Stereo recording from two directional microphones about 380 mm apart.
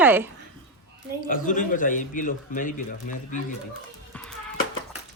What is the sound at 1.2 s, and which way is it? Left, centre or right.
A man's voice, left.